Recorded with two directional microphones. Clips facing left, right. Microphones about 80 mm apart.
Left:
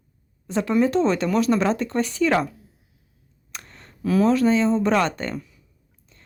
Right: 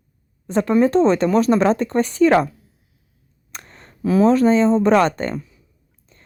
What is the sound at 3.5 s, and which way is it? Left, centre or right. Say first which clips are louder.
Speech: right 2 dB; right.